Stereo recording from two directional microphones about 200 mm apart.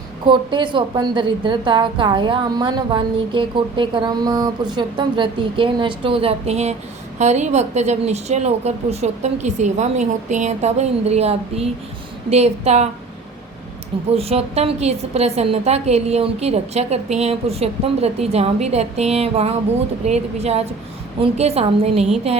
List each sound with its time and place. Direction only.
0.3 s a woman's voice: 25° right (ahead or behind)
14.1 s a woman's voice: 30° right (ahead or behind)